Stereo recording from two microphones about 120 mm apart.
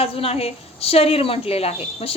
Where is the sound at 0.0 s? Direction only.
55° left (ahead or behind).